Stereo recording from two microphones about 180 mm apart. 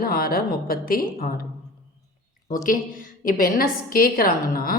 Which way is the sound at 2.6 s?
50° left (ahead or behind).